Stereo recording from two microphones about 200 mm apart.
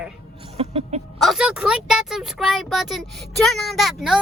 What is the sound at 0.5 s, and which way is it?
Chicken, 30° right (ahead or behind).